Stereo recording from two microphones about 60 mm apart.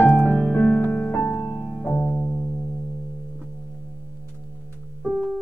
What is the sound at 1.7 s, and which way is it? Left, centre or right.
Music, centre.